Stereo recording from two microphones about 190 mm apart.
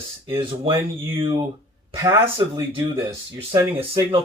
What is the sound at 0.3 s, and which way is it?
Speech, 30° right (ahead or behind).